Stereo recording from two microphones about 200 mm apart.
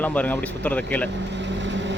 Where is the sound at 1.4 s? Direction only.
65° right (ahead or behind).